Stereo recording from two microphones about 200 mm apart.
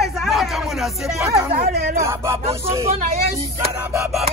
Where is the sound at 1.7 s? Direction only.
55° right (ahead or behind).